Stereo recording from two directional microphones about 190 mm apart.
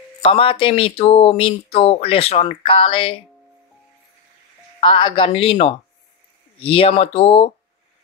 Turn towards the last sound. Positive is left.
turn(degrees=30)  # may be behind; listen again after turning